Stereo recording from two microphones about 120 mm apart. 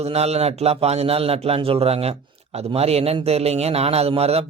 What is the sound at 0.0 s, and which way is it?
A man's voice, 60° right (ahead or behind).